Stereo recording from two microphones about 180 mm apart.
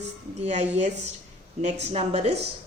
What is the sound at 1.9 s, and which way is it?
Speech, 35° right (ahead or behind).